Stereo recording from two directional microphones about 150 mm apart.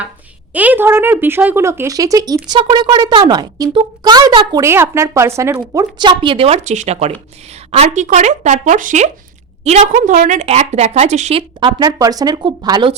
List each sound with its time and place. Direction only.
0.5 s speech: 10° right (ahead or behind)
5.7 s a woman's voice: 30° right (ahead or behind); by 11.4 s 45° right (ahead or behind)
11.6 s speech: 25° right (ahead or behind)